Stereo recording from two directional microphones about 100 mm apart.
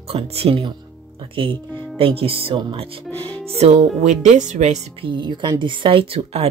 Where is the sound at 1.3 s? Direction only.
60° right (ahead or behind).